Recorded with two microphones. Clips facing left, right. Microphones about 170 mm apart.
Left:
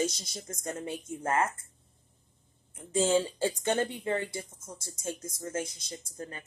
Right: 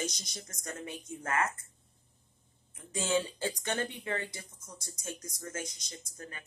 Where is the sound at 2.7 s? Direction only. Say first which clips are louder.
Left 5 dB; 30° left (ahead or behind).